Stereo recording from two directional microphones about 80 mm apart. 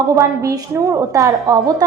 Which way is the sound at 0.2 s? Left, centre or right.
Right.